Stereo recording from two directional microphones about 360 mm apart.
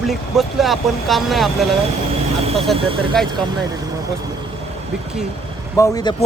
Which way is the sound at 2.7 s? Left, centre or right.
Centre.